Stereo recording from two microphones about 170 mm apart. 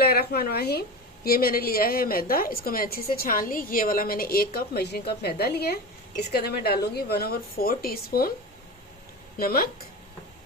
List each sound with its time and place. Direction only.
0.0 s a woman's voice: 65° left (ahead or behind)
9.4 s a woman's voice: 60° left (ahead or behind)